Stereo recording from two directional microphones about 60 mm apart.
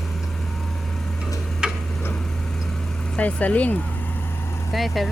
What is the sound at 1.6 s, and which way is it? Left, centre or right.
Tick-tock, centre.